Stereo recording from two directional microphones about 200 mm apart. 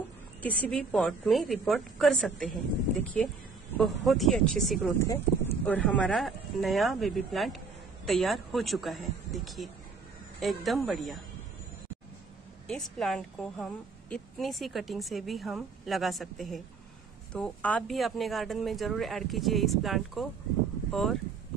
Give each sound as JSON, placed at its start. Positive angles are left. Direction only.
{"t": 0.4, "sound": "a woman's voice", "side_deg": 10}
{"t": 4.9, "sound": "a woman's voice", "side_deg": 15}
{"t": 12.6, "sound": "a woman's voice", "side_deg": 0}